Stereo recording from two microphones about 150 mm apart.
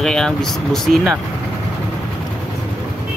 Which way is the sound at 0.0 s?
5° left (ahead or behind).